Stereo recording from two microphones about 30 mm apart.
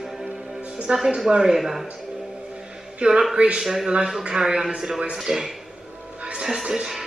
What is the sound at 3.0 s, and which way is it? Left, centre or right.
Speech, right.